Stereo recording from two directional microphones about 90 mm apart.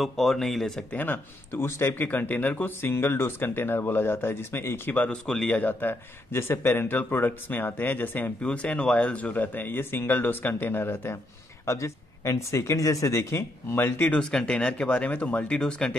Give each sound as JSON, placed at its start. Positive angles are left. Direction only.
{"t": 0.0, "sound": "speech", "side_deg": 5}
{"t": 0.9, "sound": "speech", "side_deg": 20}
{"t": 4.9, "sound": "speech", "side_deg": 10}
{"t": 5.5, "sound": "speech", "side_deg": 20}
{"t": 14.3, "sound": "speech", "side_deg": 10}